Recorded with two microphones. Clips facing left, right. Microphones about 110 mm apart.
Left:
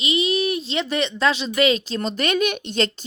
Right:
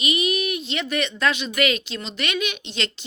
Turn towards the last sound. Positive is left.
turn(degrees=45)  # may be behind; listen again after turning